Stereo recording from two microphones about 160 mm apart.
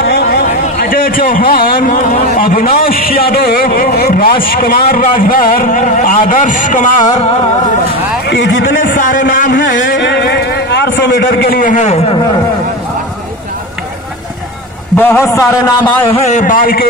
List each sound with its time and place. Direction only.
0.0 s a man's voice: 80° left; by 6.9 s 50° left (ahead or behind)
8.3 s a man's voice: 90° left; by 12.2 s 45° left (ahead or behind)
15.0 s a man's voice: 15° left (ahead or behind)
16.1 s speech: 40° left (ahead or behind); by 16.8 s 65° left (ahead or behind)